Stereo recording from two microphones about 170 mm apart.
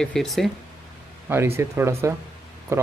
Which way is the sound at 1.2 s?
15° right (ahead or behind).